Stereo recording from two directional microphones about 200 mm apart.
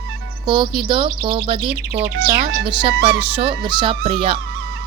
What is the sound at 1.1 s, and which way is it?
Speech, 50° right (ahead or behind).